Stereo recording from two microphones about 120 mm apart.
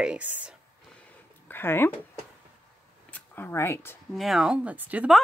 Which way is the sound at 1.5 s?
20° left (ahead or behind).